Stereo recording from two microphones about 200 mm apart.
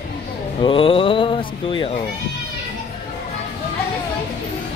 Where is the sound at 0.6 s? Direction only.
25° left (ahead or behind).